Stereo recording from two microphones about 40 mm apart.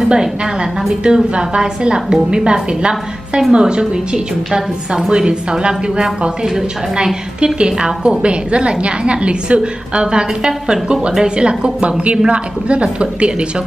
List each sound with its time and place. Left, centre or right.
0.1 s a woman's voice: right
4.5 s a woman's voice: centre
7.3 s a woman's voice: right